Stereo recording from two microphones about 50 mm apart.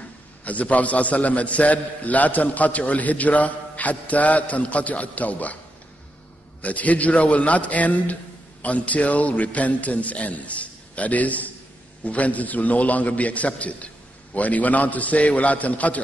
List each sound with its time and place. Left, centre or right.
0.5 s a man's voice: left
6.6 s a man's voice: left